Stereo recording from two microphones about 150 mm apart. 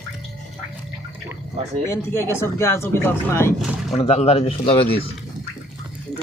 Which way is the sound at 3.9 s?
40° left (ahead or behind).